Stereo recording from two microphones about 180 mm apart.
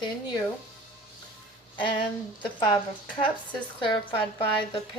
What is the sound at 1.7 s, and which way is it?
A woman's voice, 25° left (ahead or behind).